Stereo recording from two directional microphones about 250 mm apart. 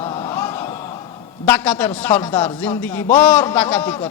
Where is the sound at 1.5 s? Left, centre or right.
Centre.